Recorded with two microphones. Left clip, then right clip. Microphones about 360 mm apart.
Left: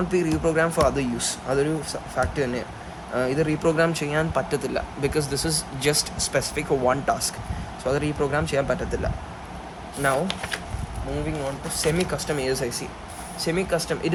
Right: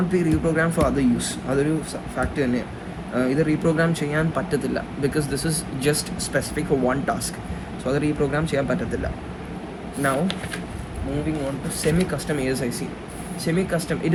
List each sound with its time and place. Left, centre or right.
0.1 s speech: left
10.0 s speech: centre
11.8 s speech: centre